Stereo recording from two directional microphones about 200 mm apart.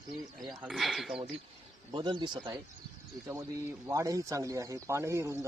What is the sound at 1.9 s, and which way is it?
Speech, 25° right (ahead or behind).